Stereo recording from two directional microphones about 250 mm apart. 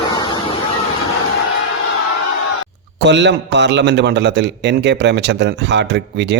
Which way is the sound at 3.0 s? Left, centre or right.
Right.